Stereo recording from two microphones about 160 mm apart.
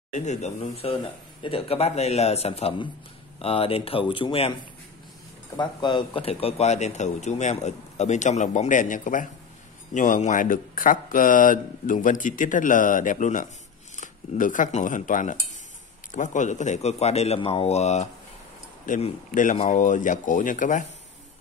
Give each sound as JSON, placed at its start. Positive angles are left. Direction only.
{"t": 0.1, "sound": "a man's voice", "side_deg": 45}
{"t": 5.6, "sound": "speech", "side_deg": 30}